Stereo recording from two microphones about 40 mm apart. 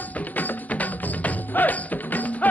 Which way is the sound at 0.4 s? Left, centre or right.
Left.